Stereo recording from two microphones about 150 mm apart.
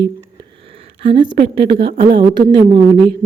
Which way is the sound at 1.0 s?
35° right (ahead or behind).